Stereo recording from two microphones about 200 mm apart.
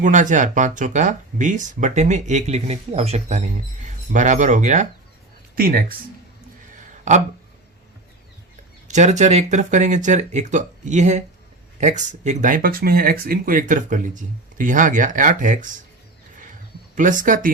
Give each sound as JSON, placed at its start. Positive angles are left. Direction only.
{"t": 0.0, "sound": "speech", "side_deg": -40}
{"t": 5.5, "sound": "speech", "side_deg": -45}
{"t": 7.1, "sound": "speech", "side_deg": -35}
{"t": 8.9, "sound": "speech", "side_deg": -35}
{"t": 16.9, "sound": "speech", "side_deg": -40}